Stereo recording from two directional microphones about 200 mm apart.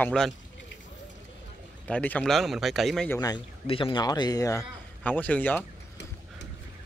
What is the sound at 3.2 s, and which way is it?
Speech, 20° left (ahead or behind).